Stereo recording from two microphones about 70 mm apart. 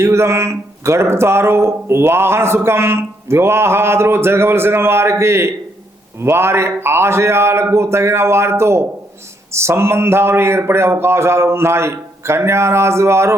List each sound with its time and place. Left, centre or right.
0.0 s speech: right